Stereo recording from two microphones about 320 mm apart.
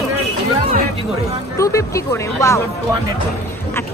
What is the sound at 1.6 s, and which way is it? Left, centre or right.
Speech, centre.